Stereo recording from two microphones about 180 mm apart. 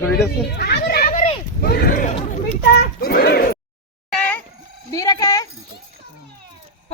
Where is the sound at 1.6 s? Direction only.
55° left (ahead or behind).